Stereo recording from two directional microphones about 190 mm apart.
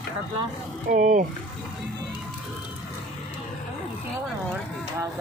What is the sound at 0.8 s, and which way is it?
Speech, 45° right (ahead or behind).